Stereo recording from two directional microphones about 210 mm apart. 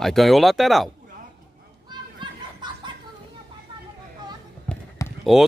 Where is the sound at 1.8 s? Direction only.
20° right (ahead or behind).